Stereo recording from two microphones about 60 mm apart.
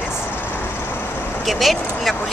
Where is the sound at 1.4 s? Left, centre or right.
Centre.